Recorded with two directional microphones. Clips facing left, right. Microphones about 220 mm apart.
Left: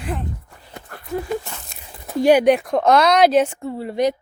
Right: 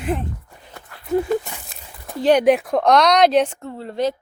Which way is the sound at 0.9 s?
45° left (ahead or behind).